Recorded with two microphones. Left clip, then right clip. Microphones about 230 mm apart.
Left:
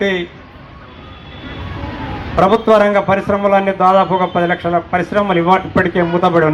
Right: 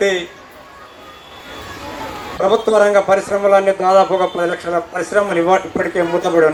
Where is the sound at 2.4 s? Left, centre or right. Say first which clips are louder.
Left 1 dB; right.